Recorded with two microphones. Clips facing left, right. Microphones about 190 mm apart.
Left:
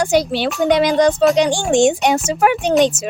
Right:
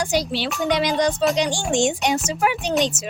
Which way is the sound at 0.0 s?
55° left (ahead or behind).